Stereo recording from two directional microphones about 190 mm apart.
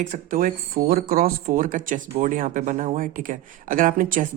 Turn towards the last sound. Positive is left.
turn(degrees=-45)  # may be behind; listen again after turning